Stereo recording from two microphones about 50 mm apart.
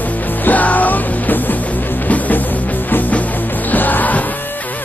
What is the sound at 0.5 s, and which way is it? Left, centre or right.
Music, left.